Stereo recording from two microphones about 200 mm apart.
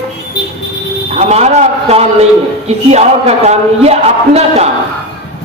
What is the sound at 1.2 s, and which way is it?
A man's voice, 35° right (ahead or behind).